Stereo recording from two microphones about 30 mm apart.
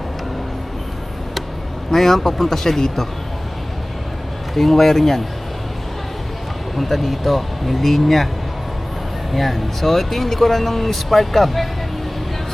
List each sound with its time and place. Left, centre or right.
1.9 s speech: centre
4.5 s speech: centre
6.7 s speech: centre
9.3 s speech: centre